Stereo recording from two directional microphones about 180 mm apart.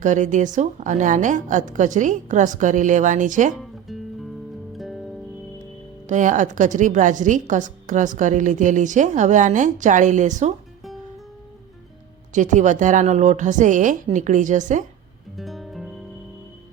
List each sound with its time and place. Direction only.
0.0 s a woman's voice: 45° right (ahead or behind)
3.6 s music: centre (ahead or behind)
6.1 s a woman's voice: 45° right (ahead or behind)
12.3 s a woman's voice: 45° right (ahead or behind)
15.4 s music: centre (ahead or behind)